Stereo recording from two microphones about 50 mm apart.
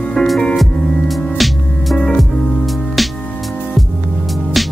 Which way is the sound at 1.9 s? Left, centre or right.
Centre.